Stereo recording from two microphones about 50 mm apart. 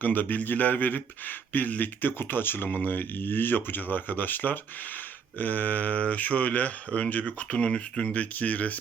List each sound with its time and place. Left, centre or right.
0.0 s speech: left